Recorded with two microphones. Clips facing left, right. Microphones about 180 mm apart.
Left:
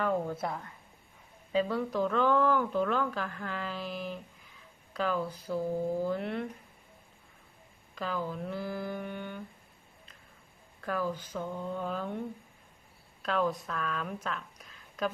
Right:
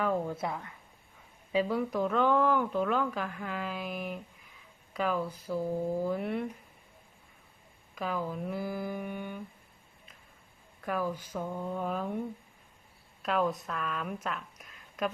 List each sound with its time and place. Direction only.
0.0 s speech: 10° right (ahead or behind)
7.9 s speech: 5° right (ahead or behind)
10.8 s speech: 5° right (ahead or behind)
13.2 s speech: 5° right (ahead or behind)